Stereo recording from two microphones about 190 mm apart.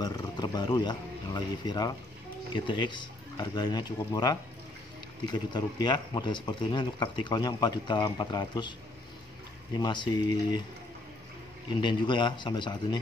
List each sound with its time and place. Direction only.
0.0 s speech: 20° left (ahead or behind)
9.8 s speech: 25° left (ahead or behind)
11.7 s speech: 25° left (ahead or behind)